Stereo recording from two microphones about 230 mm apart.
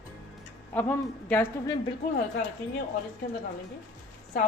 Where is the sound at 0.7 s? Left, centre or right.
Centre.